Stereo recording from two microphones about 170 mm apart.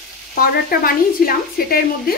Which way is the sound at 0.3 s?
60° left (ahead or behind).